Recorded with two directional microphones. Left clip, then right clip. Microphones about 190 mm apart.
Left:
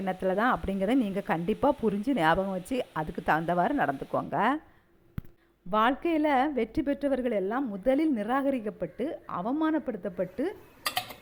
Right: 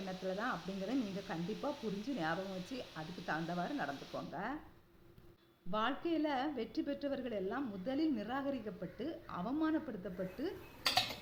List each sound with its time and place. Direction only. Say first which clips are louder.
0.0 s a woman's voice: left 13 dB; 45° left (ahead or behind)
5.7 s a woman's voice: left 11 dB; 45° left (ahead or behind)